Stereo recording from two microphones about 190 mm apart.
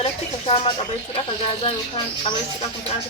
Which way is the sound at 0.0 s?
35° left (ahead or behind).